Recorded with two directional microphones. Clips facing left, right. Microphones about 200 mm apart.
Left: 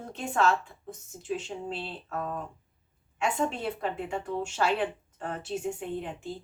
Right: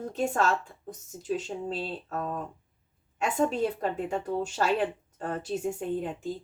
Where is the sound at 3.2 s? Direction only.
40° right (ahead or behind).